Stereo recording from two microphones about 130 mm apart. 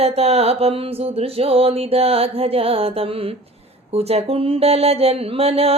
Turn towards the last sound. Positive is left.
turn(degrees=-50)  # may be behind; listen again after turning